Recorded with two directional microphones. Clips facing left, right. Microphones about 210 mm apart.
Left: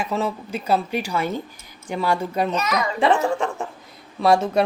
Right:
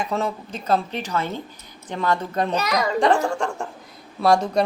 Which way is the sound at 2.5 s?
35° right (ahead or behind).